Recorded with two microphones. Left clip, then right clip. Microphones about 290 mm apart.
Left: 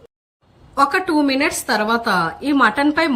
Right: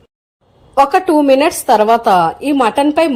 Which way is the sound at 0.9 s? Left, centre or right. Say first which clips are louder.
Right 8 dB; right.